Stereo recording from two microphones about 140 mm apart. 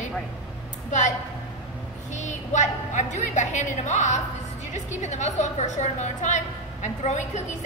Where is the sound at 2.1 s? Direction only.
60° left (ahead or behind).